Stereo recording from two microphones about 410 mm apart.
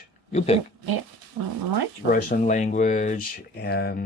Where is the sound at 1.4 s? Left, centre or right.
Right.